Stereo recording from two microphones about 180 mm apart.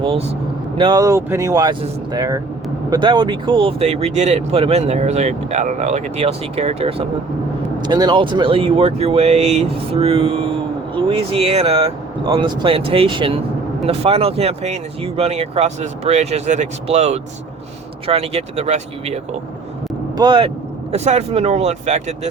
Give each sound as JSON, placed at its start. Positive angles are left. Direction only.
{"t": 0.0, "sound": "speech", "side_deg": -35}
{"t": 20.1, "sound": "speech", "side_deg": -25}
{"t": 20.9, "sound": "speech", "side_deg": -35}